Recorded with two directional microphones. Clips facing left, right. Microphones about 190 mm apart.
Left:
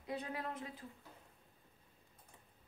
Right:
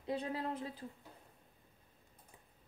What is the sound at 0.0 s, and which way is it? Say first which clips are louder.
Speech: right 4 dB; 30° right (ahead or behind).